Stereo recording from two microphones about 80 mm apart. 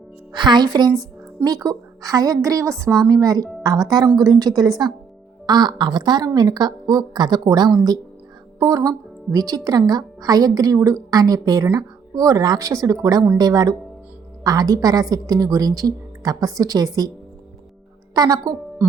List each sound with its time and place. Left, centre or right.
0.3 s a woman's voice: right
2.9 s a woman's voice: right
18.1 s a woman's voice: right